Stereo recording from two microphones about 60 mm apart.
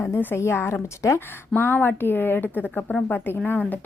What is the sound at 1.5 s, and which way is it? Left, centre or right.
A woman's voice, left.